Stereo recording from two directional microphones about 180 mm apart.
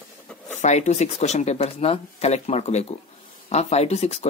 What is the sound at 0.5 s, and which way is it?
Speech, 40° left (ahead or behind).